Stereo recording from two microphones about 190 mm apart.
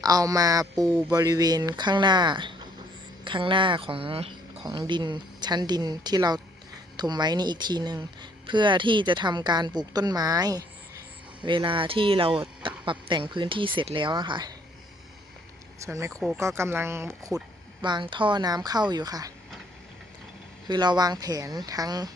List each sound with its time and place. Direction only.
0.0 s speech: 20° right (ahead or behind)
15.8 s speech: 15° right (ahead or behind)
17.8 s speech: 25° right (ahead or behind)
20.7 s speech: 20° right (ahead or behind)